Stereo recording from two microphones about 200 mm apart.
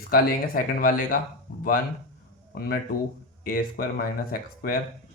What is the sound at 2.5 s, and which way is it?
Speech, 50° left (ahead or behind).